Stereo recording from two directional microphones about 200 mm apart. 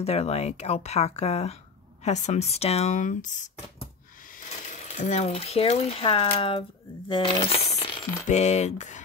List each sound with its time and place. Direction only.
0.0 s speech: 30° left (ahead or behind)
4.5 s speech: 35° left (ahead or behind)